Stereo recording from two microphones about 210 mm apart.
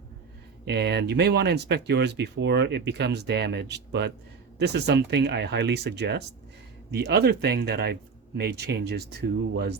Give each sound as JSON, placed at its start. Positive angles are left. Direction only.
{"t": 0.6, "sound": "speech", "side_deg": -55}